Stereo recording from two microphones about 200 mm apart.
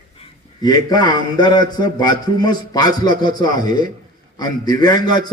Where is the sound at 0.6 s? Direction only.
20° left (ahead or behind).